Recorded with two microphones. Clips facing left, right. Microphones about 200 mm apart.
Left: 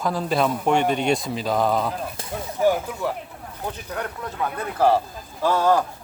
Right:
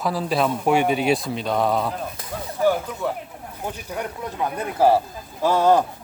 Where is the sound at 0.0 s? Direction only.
Centre (ahead or behind).